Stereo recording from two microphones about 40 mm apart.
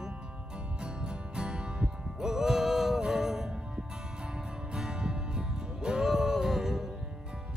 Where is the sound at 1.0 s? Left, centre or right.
Right.